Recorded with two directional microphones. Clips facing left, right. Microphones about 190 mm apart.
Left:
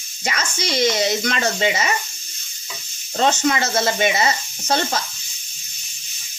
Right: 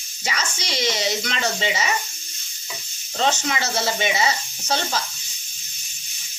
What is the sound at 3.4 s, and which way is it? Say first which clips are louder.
Speech: left 5 dB; 50° left (ahead or behind).